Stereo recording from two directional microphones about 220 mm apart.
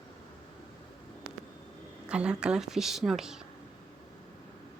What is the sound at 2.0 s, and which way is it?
Speech, 5° right (ahead or behind).